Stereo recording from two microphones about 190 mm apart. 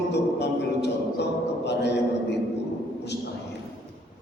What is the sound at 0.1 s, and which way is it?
Music, 65° left (ahead or behind).